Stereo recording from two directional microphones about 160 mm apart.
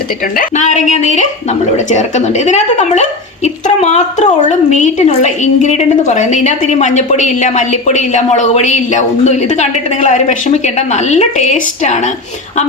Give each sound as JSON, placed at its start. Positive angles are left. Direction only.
{"t": 0.3, "sound": "a woman's voice", "side_deg": 50}